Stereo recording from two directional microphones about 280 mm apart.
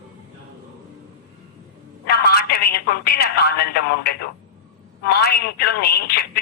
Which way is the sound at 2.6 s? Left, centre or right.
Left.